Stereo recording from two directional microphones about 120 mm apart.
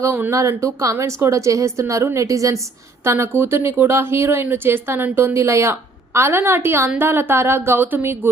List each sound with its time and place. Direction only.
0.0 s speech: 20° right (ahead or behind)